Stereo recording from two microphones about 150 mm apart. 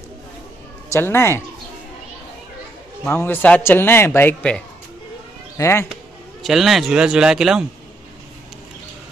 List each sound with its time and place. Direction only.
0.9 s a man's voice: 15° left (ahead or behind)
3.0 s a man's voice: 15° left (ahead or behind)
6.4 s a man's voice: centre (ahead or behind)